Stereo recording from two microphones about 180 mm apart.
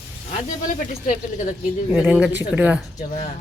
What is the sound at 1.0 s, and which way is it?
Speech, 45° left (ahead or behind).